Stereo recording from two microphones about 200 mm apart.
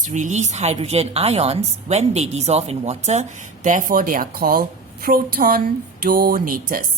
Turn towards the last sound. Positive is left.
turn(degrees=-45)  # may be behind; listen again after turning